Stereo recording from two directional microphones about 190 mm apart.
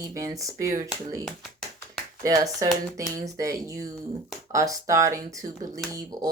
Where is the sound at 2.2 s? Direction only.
20° right (ahead or behind).